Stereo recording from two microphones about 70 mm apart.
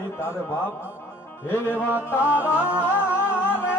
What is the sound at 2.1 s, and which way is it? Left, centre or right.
Speech, left.